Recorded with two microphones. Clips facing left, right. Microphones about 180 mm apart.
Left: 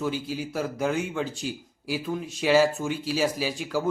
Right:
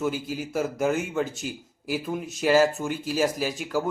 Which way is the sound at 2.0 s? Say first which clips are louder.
Right 1 dB; 5° right (ahead or behind).